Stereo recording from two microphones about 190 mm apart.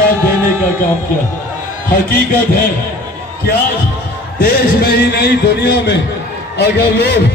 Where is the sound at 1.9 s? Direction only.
50° left (ahead or behind).